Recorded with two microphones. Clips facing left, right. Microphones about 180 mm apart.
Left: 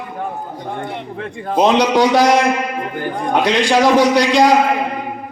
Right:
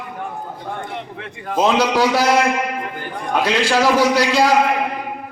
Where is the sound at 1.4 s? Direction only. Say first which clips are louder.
Left 3 dB; 25° left (ahead or behind).